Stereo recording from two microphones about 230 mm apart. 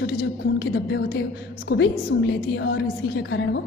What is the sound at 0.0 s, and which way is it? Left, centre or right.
A woman's voice, left.